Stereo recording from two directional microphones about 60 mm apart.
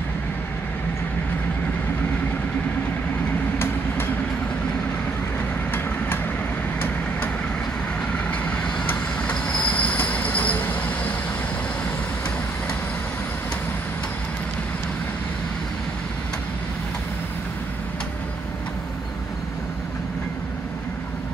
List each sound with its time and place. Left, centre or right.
3.5 s vehicle: left
9.3 s train: left